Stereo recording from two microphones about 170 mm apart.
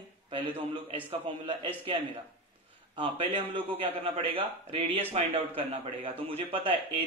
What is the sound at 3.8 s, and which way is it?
A man's voice, 30° right (ahead or behind).